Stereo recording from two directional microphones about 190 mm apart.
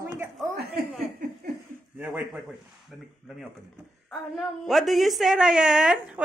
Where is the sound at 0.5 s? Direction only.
60° right (ahead or behind).